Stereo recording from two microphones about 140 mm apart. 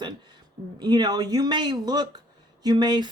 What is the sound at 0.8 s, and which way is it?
Speech, 30° right (ahead or behind).